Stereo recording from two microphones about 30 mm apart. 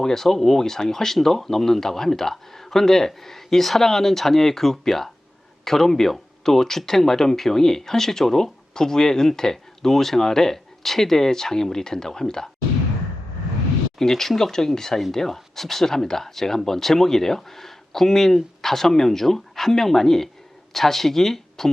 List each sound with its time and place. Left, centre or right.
0.0 s speech: centre
14.0 s speech: centre